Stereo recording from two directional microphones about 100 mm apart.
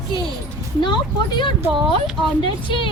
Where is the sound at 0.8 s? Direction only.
50° left (ahead or behind).